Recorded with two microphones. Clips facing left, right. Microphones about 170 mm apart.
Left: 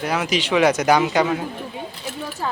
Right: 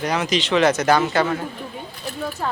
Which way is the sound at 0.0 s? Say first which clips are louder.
Right 1 dB; 5° left (ahead or behind).